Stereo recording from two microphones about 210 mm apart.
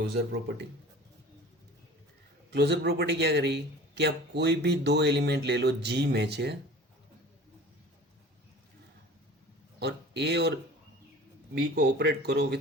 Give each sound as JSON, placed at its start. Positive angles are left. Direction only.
{"t": 2.5, "sound": "a man's voice", "side_deg": -55}
{"t": 9.8, "sound": "speech", "side_deg": -55}
{"t": 11.5, "sound": "a man's voice", "side_deg": -50}